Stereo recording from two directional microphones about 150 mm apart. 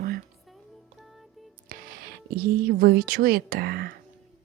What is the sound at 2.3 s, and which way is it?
Speech, 90° right.